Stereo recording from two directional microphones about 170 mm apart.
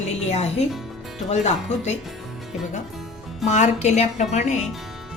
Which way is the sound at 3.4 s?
45° left (ahead or behind).